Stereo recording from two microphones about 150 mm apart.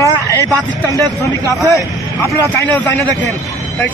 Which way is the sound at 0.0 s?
20° left (ahead or behind).